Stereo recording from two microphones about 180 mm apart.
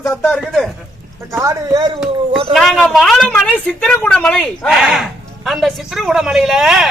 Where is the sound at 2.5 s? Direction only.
Centre (ahead or behind).